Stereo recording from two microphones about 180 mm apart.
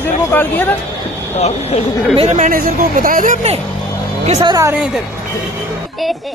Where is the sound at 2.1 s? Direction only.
35° right (ahead or behind).